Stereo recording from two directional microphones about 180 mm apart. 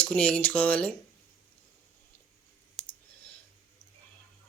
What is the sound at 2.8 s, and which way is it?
Clicking, centre (ahead or behind).